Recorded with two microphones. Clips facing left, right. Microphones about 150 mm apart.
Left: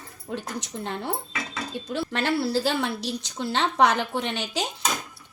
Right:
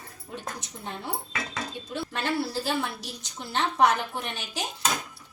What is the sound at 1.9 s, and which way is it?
A woman's voice, 80° left.